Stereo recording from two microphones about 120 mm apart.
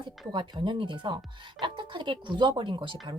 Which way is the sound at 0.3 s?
40° right (ahead or behind).